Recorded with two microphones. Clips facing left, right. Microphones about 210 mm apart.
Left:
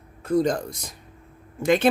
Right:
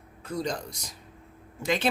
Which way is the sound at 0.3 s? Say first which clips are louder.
Left 10 dB; 50° left (ahead or behind).